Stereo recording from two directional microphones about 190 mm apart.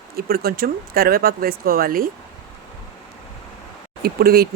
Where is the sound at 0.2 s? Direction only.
55° right (ahead or behind).